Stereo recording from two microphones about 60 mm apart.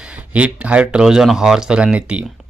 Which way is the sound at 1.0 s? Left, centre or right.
Centre.